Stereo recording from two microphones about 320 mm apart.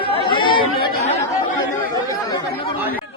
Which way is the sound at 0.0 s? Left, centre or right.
Centre.